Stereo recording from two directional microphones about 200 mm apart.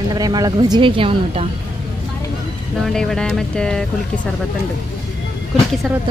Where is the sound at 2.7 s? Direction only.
Centre (ahead or behind).